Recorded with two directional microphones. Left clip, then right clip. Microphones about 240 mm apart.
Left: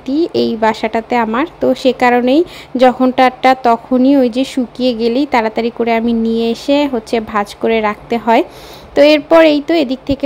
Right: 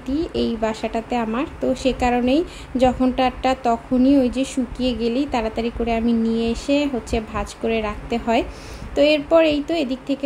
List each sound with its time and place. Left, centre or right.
0.0 s speech: left